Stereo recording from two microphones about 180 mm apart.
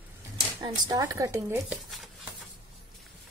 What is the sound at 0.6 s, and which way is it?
Speech, 20° right (ahead or behind).